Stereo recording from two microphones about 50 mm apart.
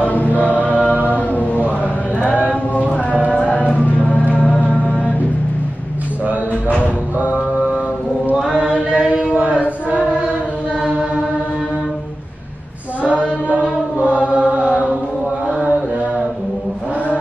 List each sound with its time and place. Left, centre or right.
0.0 s choir: left
0.9 s chant: right
1.3 s chant: left
2.7 s music: left
3.1 s music: right
3.4 s music: left
8.4 s chant: centre
8.6 s chant: right
9.8 s choir: right
13.2 s mantra: right
14.2 s chant: right